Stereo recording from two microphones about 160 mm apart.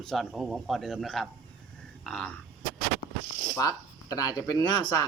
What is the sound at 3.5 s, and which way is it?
Speech, 20° left (ahead or behind).